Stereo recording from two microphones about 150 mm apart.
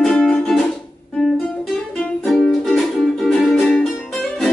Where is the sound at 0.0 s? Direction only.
5° left (ahead or behind).